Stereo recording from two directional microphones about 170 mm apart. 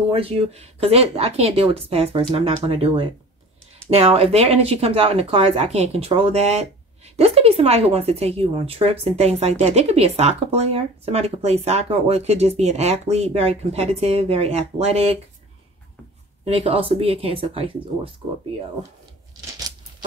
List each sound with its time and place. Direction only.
0.1 s speech: 35° right (ahead or behind)
16.4 s speech: 35° right (ahead or behind)